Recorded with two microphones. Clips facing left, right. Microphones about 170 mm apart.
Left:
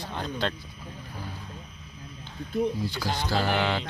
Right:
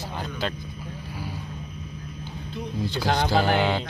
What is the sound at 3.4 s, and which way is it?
Music, 15° right (ahead or behind).